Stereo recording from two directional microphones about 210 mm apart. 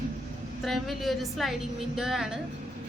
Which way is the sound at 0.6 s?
Centre (ahead or behind).